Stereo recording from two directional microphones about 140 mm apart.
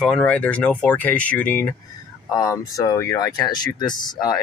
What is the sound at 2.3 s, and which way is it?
Speech, 25° left (ahead or behind).